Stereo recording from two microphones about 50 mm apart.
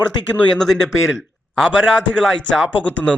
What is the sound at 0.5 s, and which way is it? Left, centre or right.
A man's voice, centre.